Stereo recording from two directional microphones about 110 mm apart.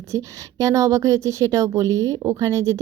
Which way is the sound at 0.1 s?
30° right (ahead or behind).